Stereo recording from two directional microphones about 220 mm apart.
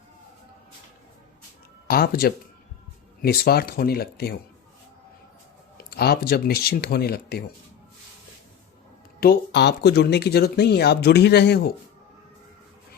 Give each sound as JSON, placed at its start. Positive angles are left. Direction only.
{"t": 1.9, "sound": "speech", "side_deg": 45}
{"t": 5.7, "sound": "speech", "side_deg": 45}
{"t": 9.2, "sound": "speech", "side_deg": 50}